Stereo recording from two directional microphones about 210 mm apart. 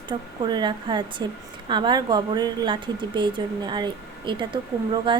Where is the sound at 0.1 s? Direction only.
20° right (ahead or behind).